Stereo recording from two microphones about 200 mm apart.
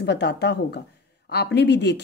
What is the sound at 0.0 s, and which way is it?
Speech, 60° left (ahead or behind).